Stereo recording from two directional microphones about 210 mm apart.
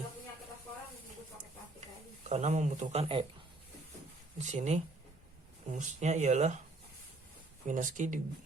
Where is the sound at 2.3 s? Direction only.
35° right (ahead or behind).